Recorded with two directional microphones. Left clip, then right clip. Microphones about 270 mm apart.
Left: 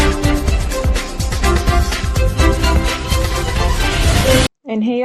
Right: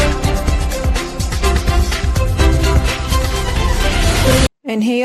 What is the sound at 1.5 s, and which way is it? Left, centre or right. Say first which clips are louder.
Music: left 2 dB; centre.